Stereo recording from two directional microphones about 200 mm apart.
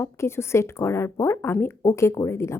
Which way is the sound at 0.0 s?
10° left (ahead or behind).